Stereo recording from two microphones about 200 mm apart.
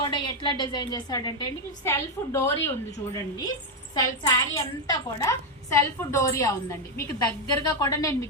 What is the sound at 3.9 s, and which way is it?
A woman's voice, 20° left (ahead or behind).